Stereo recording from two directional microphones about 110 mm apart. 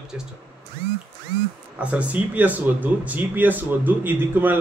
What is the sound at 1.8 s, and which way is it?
Speech, 10° right (ahead or behind).